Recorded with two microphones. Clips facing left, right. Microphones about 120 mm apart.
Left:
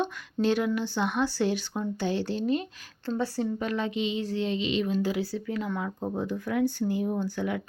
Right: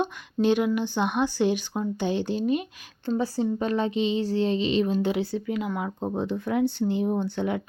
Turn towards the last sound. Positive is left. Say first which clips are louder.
# right 3 dB
turn(degrees=-25)  # may be behind; listen again after turning